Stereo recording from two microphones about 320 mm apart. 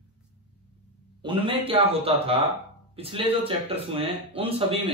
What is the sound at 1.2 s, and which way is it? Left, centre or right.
Speech, centre.